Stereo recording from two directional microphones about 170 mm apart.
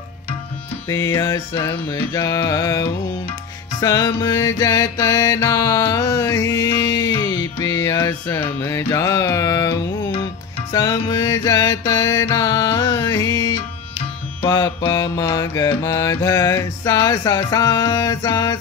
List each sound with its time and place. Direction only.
0.8 s music: 15° left (ahead or behind)
2.1 s mantra: 20° left (ahead or behind)
3.8 s mantra: 20° left (ahead or behind)